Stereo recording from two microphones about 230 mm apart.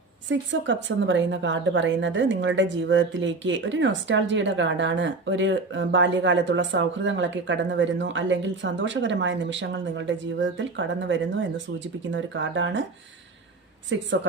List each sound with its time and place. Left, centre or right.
0.3 s a woman's voice: right
13.9 s a woman's voice: right